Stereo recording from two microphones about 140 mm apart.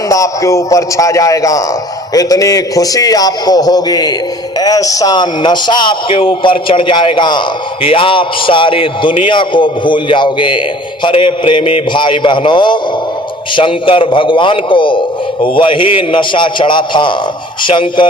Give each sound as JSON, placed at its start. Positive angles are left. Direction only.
{"t": 0.1, "sound": "a man's voice", "side_deg": 25}